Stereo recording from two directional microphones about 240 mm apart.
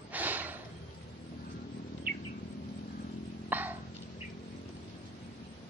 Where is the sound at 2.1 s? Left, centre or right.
Right.